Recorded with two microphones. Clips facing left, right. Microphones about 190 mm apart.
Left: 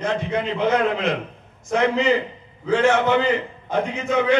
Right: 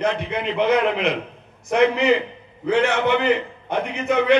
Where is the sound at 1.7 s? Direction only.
65° right (ahead or behind).